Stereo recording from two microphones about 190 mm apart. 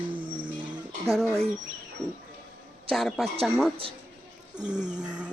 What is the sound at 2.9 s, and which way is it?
Speech, centre (ahead or behind).